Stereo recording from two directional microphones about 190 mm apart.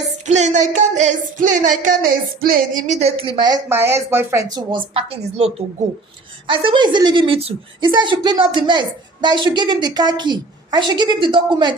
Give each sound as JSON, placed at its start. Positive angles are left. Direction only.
{"t": 0.3, "sound": "a woman's voice", "side_deg": -40}